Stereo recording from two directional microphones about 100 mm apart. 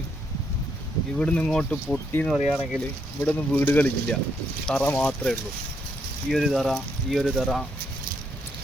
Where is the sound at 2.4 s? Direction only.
5° right (ahead or behind).